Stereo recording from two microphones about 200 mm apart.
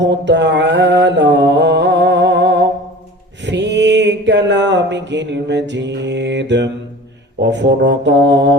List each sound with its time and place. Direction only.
0.0 s mantra: 60° right (ahead or behind)